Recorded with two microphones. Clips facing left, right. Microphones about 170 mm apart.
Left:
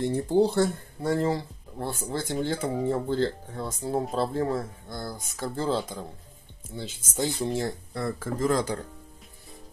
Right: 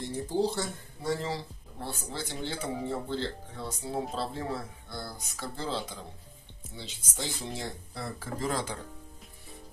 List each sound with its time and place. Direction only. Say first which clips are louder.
0.0 s speech: left 7 dB; 60° left (ahead or behind)